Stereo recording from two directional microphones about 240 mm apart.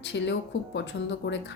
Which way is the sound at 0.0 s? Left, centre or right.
Left.